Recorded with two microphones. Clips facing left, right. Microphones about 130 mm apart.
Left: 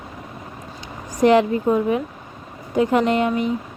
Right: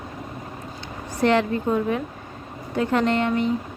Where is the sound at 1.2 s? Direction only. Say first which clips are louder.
Left 5 dB; 10° left (ahead or behind).